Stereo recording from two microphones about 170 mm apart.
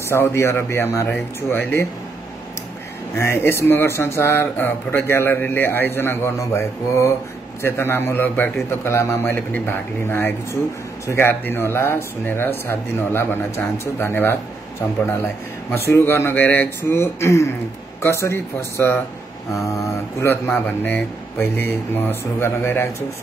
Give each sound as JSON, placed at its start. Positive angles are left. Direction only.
{"t": 0.1, "sound": "speech", "side_deg": 15}
{"t": 3.2, "sound": "speech", "side_deg": 15}
{"t": 15.7, "sound": "speech", "side_deg": 15}